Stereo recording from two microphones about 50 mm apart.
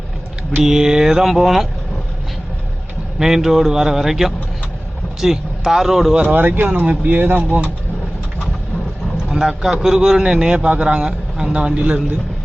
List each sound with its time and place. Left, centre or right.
0.6 s a man's voice: centre
3.2 s a man's voice: centre
6.2 s speech: right
9.3 s a man's voice: centre